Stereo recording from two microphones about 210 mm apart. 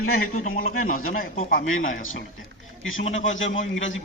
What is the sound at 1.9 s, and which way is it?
A man's voice, 70° left (ahead or behind).